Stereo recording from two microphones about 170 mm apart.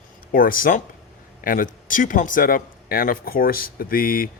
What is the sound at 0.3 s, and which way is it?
Speech, 55° left (ahead or behind).